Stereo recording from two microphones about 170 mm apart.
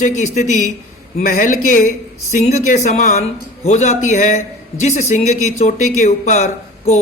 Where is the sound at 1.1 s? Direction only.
55° left (ahead or behind).